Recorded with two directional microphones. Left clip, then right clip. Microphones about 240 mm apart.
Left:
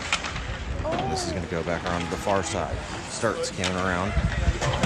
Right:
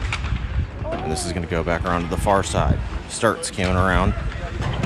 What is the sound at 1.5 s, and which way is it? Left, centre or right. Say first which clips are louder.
Speech: right 6 dB; right.